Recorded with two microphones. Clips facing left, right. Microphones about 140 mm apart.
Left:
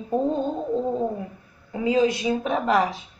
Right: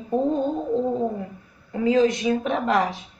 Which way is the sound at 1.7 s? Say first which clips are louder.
Right 2 dB; 15° left (ahead or behind).